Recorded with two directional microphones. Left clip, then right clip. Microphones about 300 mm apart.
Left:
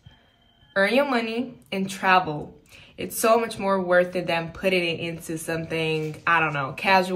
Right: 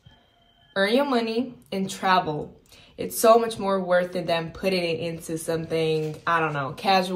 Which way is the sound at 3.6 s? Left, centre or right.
Centre.